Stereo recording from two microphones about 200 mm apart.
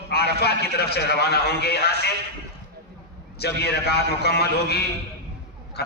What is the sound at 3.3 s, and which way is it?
A man's voice, 55° left (ahead or behind).